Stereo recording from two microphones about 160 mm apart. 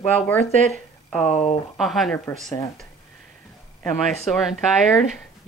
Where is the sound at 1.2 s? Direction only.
45° left (ahead or behind).